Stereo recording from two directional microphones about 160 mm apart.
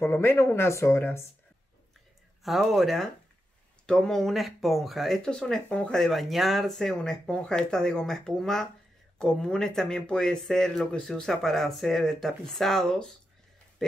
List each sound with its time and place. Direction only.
0.0 s speech: 15° left (ahead or behind)
2.4 s speech: centre (ahead or behind)